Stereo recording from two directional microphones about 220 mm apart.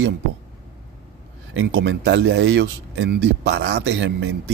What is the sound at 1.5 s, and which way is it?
Speech, 55° right (ahead or behind).